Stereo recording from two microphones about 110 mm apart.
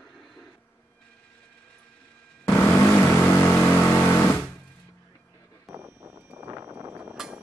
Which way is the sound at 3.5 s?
15° left (ahead or behind).